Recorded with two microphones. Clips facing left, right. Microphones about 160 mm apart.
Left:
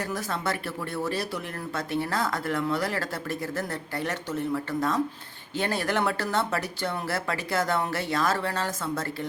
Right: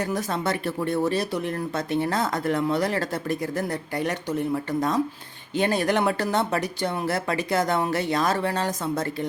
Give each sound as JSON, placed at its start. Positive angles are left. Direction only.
{"t": 0.0, "sound": "speech", "side_deg": -20}